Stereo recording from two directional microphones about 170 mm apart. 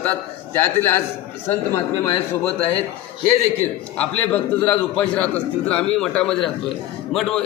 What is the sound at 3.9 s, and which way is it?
A man's voice, 10° left (ahead or behind).